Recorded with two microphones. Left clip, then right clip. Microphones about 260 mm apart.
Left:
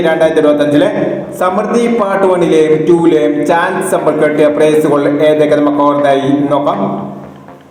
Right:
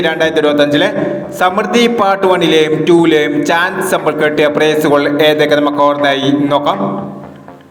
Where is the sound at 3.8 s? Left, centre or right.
Right.